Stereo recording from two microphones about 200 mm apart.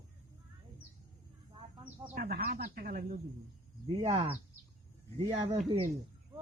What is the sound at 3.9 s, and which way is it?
Speech, 20° right (ahead or behind).